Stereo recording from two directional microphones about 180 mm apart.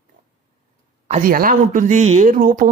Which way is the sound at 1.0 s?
45° right (ahead or behind).